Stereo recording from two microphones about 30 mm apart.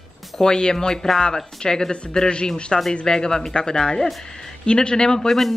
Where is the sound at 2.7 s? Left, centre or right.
Centre.